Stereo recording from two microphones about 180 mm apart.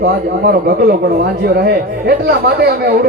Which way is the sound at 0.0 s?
60° right (ahead or behind).